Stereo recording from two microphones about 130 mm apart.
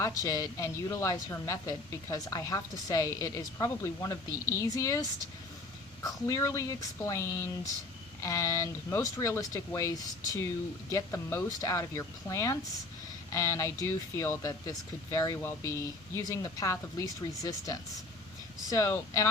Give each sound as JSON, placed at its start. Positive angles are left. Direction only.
{"t": 0.0, "sound": "a woman's voice", "side_deg": 25}